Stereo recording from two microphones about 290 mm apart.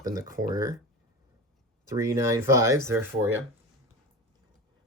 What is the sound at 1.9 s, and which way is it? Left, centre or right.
Speech, centre.